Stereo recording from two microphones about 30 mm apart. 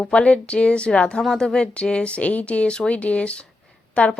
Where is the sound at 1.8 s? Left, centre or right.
Left.